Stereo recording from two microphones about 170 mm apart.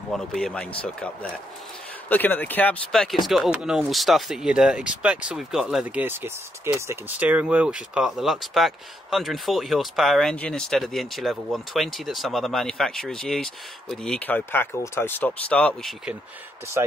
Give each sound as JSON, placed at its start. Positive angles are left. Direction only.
{"t": 0.3, "sound": "speech", "side_deg": 5}
{"t": 2.0, "sound": "speech", "side_deg": 10}